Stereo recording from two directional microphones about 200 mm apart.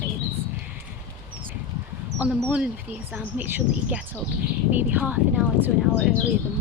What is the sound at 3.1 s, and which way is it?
Speech, 10° right (ahead or behind).